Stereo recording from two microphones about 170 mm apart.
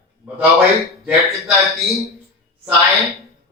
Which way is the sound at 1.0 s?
Centre (ahead or behind).